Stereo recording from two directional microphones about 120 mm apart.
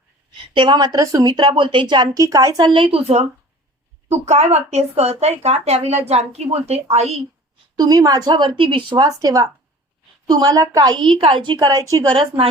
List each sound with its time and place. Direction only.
0.5 s a woman's voice: 40° right (ahead or behind)
2.1 s a woman's voice: 30° right (ahead or behind)
2.7 s speech: 50° right (ahead or behind)
7.8 s a woman's voice: 30° right (ahead or behind)
9.0 s a woman's voice: 30° right (ahead or behind)